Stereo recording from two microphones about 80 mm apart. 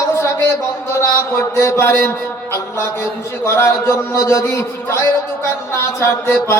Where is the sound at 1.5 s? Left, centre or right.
Left.